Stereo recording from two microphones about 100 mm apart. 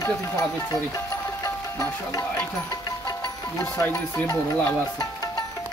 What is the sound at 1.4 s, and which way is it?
Music, 30° left (ahead or behind).